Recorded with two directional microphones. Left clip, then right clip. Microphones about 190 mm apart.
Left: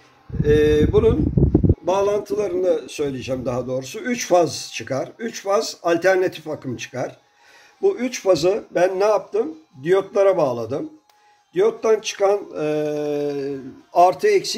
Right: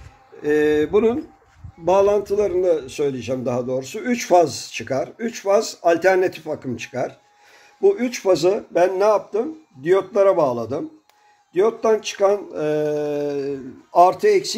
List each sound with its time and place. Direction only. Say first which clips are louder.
0.4 s mantra: left 2 dB; 40° right (ahead or behind)
1.9 s a man's voice: right 5 dB; 35° right (ahead or behind)